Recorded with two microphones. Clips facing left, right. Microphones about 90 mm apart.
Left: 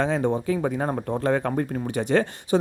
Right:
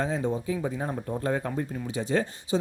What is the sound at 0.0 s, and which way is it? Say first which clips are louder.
A man's voice: left 5 dB; 70° left (ahead or behind).